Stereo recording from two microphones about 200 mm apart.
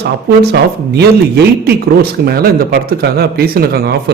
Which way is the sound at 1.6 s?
50° right (ahead or behind).